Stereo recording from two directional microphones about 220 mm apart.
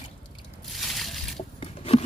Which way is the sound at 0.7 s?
Centre (ahead or behind).